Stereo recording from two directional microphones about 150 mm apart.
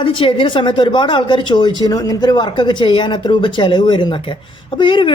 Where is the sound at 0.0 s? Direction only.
35° left (ahead or behind).